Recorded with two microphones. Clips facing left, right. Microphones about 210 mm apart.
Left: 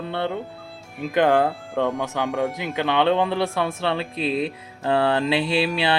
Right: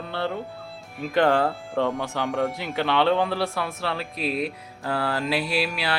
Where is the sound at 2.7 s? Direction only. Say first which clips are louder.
Left 1 dB; 15° left (ahead or behind).